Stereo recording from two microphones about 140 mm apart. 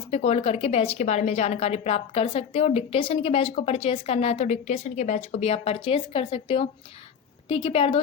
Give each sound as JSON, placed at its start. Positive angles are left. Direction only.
{"t": 0.1, "sound": "a woman's voice", "side_deg": 50}